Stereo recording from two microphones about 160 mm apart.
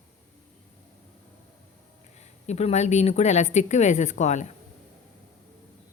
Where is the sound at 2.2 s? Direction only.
45° left (ahead or behind).